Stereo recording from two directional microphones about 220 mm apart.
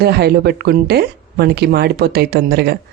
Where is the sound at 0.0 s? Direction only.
45° right (ahead or behind).